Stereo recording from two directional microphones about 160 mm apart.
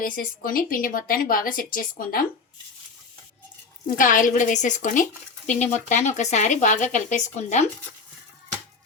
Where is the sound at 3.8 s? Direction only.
55° left (ahead or behind).